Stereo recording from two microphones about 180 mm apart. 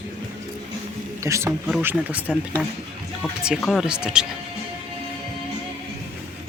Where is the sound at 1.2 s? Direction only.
15° right (ahead or behind).